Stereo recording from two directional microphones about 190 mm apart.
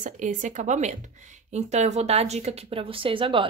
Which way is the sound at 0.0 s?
40° right (ahead or behind).